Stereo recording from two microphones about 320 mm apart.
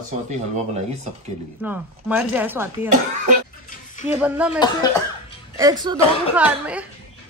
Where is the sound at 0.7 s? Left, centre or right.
Right.